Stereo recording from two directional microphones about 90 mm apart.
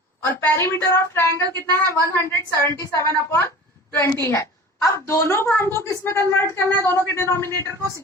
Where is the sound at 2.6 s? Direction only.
30° left (ahead or behind).